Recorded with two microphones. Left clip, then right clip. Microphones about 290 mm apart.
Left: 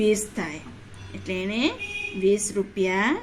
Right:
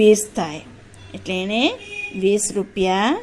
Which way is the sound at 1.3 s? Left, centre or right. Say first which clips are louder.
Right 6 dB; centre.